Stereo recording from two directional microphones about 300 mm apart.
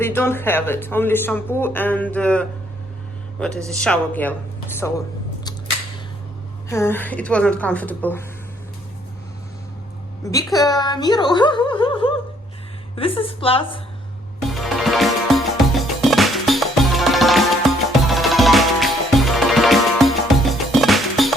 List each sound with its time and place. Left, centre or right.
0.0 s speech: centre
3.7 s a woman's voice: centre
6.7 s a woman's voice: centre
10.5 s a woman's voice: centre
14.5 s music: centre